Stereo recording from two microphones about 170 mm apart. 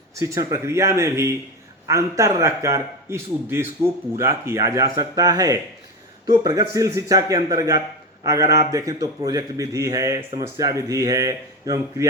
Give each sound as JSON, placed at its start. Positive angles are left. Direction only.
{"t": 0.2, "sound": "a man's voice", "side_deg": -15}